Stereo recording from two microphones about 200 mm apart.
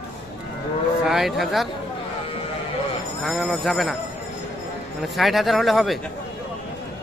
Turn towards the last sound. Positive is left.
turn(degrees=0)  # may be behind; listen again after turning